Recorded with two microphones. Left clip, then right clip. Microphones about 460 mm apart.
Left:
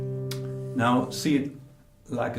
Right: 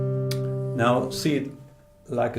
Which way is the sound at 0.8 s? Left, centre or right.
Right.